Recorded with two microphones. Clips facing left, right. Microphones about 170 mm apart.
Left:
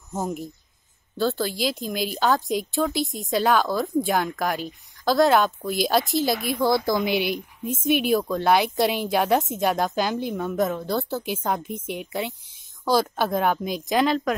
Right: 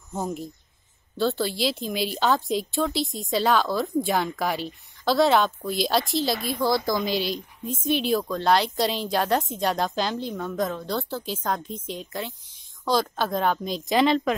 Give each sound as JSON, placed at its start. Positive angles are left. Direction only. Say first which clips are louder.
{"t": 0.1, "sound": "speech", "louder": "left 1 dB", "side_deg": 5}